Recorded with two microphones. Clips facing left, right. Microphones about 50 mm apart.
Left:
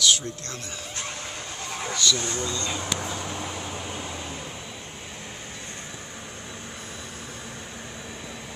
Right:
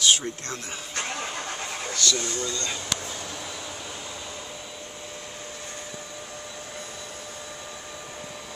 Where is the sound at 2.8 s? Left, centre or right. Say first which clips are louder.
Left 3 dB; left.